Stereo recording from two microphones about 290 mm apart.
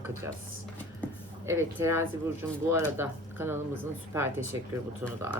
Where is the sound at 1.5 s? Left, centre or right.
Centre.